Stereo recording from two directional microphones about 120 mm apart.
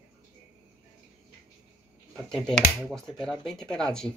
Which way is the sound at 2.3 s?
5° left (ahead or behind).